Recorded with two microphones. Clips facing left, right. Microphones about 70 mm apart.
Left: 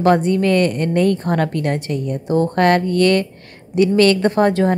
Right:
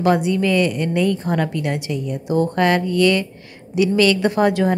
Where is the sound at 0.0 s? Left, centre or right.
Left.